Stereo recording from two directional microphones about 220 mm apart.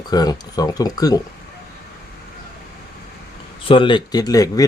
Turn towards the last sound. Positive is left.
turn(degrees=15)  # may be behind; listen again after turning